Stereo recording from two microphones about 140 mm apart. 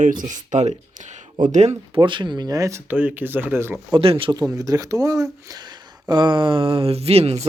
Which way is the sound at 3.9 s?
40° right (ahead or behind).